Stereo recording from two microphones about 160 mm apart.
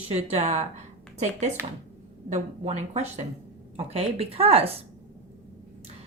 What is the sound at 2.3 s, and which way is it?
Speech, 45° right (ahead or behind).